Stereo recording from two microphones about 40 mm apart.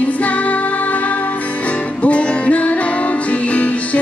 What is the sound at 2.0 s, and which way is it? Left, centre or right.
Music, left.